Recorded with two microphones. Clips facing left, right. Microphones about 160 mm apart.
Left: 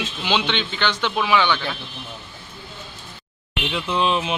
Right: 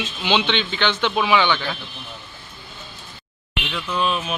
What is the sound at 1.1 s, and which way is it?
Speech, 10° right (ahead or behind).